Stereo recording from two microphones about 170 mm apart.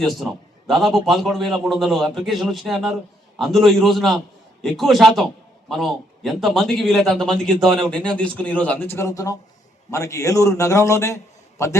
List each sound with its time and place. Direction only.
0.0 s a man's voice: centre (ahead or behind); by 11.8 s 15° left (ahead or behind)